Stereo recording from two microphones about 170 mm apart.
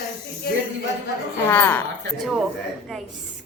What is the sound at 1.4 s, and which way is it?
Speech, 10° left (ahead or behind).